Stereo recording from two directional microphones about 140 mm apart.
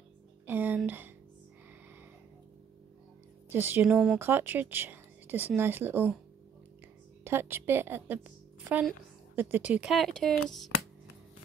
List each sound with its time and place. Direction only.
0.5 s a sound: 15° right (ahead or behind)
0.8 s speech: 15° right (ahead or behind)
3.4 s a woman's voice: 15° right (ahead or behind)
7.2 s a woman's voice: 15° right (ahead or behind)
9.3 s speech: 15° right (ahead or behind); by 10.7 s 5° left (ahead or behind)